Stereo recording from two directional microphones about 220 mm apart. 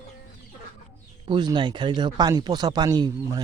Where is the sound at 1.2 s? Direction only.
20° right (ahead or behind).